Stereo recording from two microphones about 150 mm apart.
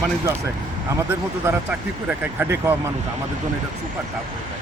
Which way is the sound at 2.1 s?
15° right (ahead or behind).